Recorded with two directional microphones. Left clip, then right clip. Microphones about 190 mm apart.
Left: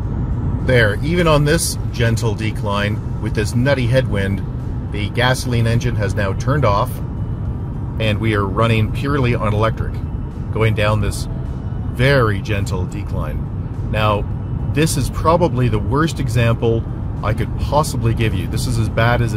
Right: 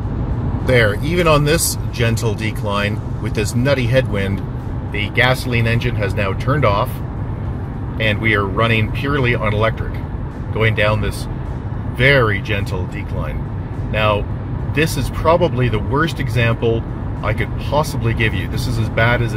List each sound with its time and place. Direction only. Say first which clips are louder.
0.7 s speech: even; 10° left (ahead or behind)
8.0 s speech: right 3 dB; 20° left (ahead or behind)
13.9 s speech: right 1 dB; 20° left (ahead or behind)